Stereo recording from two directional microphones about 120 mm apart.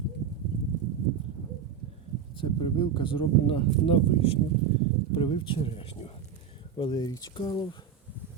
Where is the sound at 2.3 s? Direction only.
45° left (ahead or behind).